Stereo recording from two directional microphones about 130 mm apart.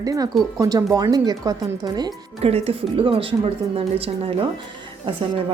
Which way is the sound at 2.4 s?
50° right (ahead or behind).